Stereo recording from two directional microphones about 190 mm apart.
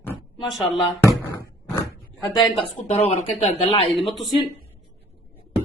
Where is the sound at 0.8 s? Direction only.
15° left (ahead or behind).